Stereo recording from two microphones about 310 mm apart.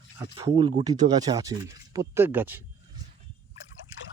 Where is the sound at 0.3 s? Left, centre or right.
Centre.